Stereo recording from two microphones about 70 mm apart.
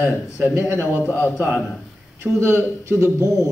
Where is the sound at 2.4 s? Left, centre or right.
Right.